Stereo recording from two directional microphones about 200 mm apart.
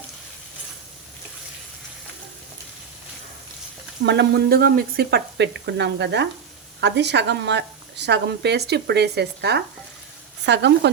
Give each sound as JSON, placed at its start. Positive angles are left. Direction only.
{"t": 4.0, "sound": "speech", "side_deg": -60}